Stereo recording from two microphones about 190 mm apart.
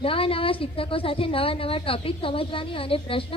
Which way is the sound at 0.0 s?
30° left (ahead or behind).